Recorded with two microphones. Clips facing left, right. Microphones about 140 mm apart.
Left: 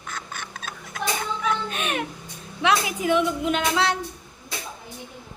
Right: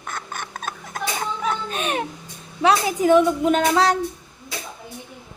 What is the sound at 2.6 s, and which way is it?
A woman's voice, 40° right (ahead or behind).